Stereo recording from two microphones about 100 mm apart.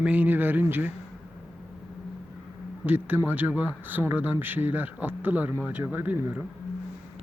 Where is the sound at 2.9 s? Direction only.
20° right (ahead or behind).